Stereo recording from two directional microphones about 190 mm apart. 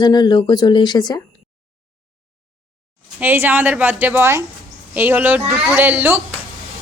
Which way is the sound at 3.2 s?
10° right (ahead or behind).